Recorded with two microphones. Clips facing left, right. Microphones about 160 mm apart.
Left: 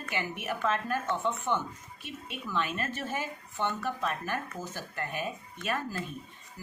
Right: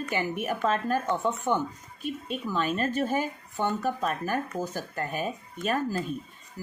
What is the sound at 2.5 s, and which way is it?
Speech, 35° right (ahead or behind).